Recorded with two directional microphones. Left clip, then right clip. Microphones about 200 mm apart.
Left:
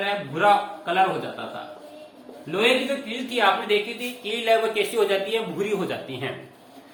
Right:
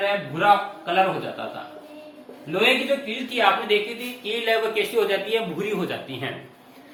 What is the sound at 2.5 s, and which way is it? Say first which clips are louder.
Speech: right 1 dB; 25° left (ahead or behind).